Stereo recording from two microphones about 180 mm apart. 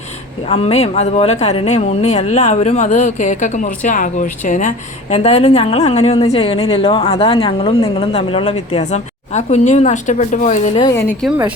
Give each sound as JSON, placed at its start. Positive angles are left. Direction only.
{"t": 0.4, "sound": "a woman's voice", "side_deg": 35}